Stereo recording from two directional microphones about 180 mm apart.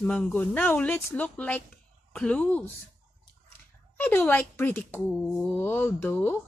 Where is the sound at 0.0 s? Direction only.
5° left (ahead or behind).